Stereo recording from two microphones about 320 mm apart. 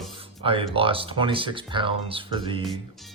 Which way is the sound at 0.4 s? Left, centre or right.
Centre.